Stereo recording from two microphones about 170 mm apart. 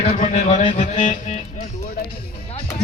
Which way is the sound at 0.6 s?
35° left (ahead or behind).